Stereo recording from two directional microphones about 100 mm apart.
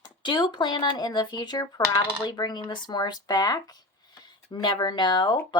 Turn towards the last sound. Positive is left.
turn(degrees=45)  # may be behind; listen again after turning